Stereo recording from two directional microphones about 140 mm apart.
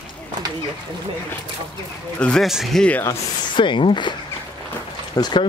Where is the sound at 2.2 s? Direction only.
5° left (ahead or behind).